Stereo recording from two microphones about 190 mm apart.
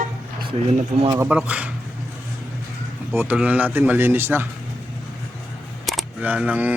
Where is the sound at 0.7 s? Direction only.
35° right (ahead or behind).